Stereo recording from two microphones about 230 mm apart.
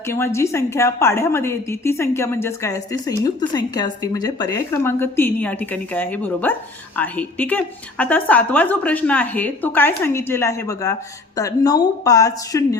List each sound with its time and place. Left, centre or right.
0.1 s a woman's voice: centre